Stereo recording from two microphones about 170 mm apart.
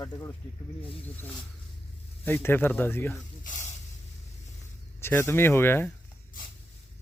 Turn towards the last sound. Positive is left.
turn(degrees=10)  # may be behind; listen again after turning